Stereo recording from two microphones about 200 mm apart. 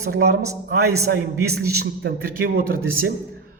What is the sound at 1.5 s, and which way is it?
Speech, 55° right (ahead or behind).